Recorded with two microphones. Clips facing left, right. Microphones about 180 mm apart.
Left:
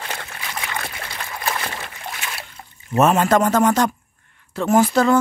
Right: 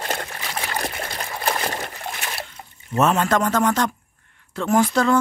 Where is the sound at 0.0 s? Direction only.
45° right (ahead or behind).